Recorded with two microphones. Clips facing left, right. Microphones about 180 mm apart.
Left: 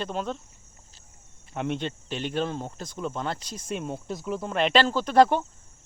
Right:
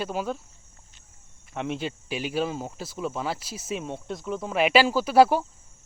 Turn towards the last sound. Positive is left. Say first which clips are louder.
# right 1 dB
turn(degrees=-5)  # may be behind; listen again after turning